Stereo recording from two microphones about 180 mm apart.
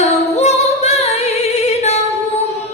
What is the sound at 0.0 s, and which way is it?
Music, 35° left (ahead or behind).